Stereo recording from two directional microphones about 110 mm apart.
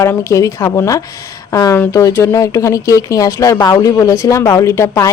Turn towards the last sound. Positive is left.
turn(degrees=25)  # may be behind; listen again after turning